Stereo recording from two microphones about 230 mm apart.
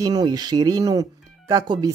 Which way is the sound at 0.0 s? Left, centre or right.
Centre.